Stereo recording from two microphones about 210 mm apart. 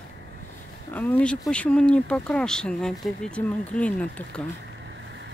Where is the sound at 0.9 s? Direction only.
5° left (ahead or behind).